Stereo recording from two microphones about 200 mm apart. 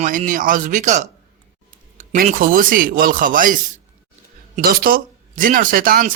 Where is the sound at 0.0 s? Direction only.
40° right (ahead or behind).